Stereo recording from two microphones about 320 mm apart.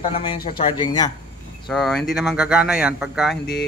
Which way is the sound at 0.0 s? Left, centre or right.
Centre.